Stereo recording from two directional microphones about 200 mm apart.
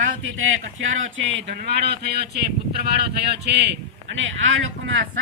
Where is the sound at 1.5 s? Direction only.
55° right (ahead or behind).